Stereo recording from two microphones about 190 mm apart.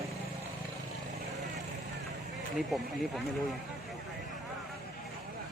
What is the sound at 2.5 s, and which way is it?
Speech, centre (ahead or behind).